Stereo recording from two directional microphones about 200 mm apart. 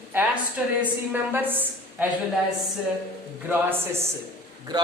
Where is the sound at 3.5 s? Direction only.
10° right (ahead or behind).